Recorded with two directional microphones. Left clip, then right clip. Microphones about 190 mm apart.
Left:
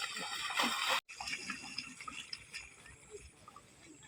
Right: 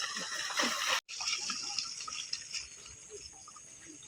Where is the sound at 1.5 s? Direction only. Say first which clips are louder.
Right 6 dB; 5° left (ahead or behind).